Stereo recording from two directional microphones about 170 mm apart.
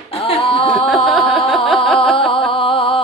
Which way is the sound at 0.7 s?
Centre (ahead or behind).